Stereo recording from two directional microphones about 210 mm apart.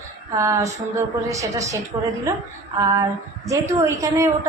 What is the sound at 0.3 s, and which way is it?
A woman's voice, 15° right (ahead or behind).